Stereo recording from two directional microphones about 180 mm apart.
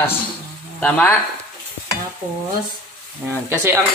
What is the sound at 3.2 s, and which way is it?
Speech, 10° right (ahead or behind).